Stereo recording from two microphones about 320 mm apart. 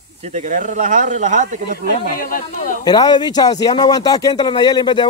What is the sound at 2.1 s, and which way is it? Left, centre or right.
Speech, left.